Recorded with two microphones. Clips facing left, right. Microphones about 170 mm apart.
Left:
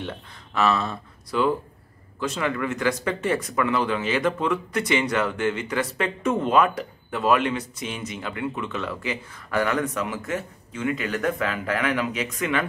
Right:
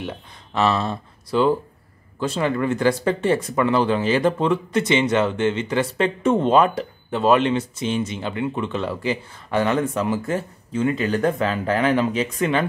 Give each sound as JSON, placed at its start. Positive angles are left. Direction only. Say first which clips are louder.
{"t": 0.6, "sound": "speech", "louder": "right 2 dB", "side_deg": -30}